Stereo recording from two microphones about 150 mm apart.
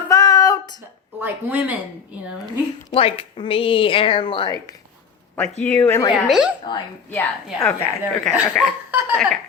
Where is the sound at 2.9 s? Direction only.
40° left (ahead or behind).